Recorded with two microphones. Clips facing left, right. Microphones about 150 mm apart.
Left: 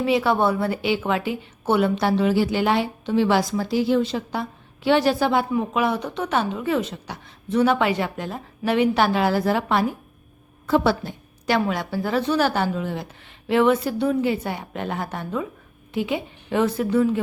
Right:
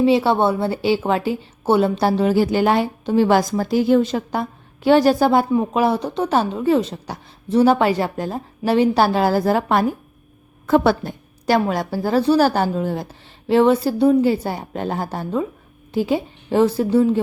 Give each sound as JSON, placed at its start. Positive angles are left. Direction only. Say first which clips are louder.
{"t": 0.0, "sound": "a woman's voice", "louder": "right 4 dB", "side_deg": -30}